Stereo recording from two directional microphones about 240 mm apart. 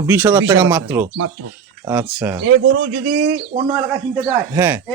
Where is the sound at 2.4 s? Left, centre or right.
Right.